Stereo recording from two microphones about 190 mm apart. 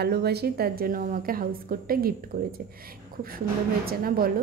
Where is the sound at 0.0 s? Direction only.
55° right (ahead or behind).